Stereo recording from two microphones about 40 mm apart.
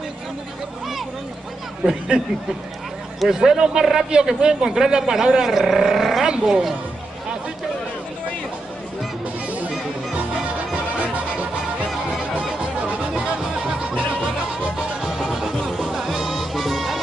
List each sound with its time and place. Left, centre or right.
1.9 s a man's voice: centre
11.0 s music: right
15.0 s music: centre